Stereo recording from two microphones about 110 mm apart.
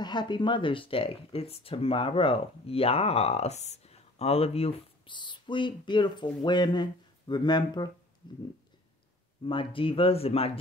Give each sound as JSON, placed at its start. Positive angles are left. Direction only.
{"t": 0.0, "sound": "speech", "side_deg": 40}
{"t": 5.1, "sound": "speech", "side_deg": 45}
{"t": 9.4, "sound": "speech", "side_deg": 50}